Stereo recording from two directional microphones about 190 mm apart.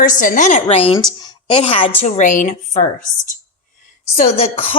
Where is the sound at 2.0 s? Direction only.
40° left (ahead or behind).